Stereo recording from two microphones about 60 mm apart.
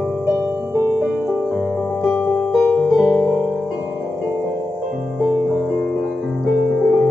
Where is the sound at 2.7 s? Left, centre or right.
Centre.